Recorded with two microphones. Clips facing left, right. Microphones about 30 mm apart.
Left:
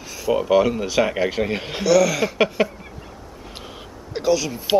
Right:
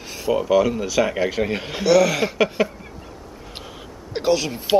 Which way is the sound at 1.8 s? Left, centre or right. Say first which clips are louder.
Right 1 dB; centre.